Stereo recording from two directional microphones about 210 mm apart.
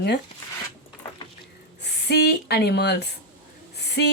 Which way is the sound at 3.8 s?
50° left (ahead or behind).